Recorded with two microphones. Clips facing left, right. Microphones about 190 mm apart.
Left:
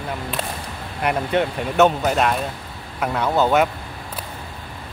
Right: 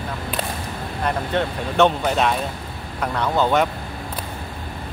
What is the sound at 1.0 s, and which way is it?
Speech, 10° left (ahead or behind).